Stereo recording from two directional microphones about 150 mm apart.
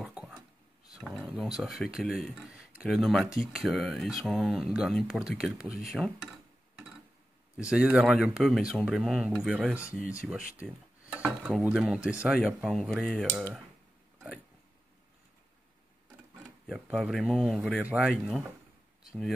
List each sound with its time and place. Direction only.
0.0 s a sound: 5° right (ahead or behind)
0.9 s speech: centre (ahead or behind)
7.5 s speech: 5° right (ahead or behind)
13.3 s speech: 15° right (ahead or behind)
16.6 s speech: centre (ahead or behind)